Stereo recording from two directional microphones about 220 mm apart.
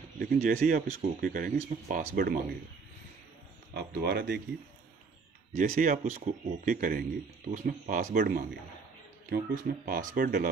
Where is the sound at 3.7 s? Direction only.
45° right (ahead or behind).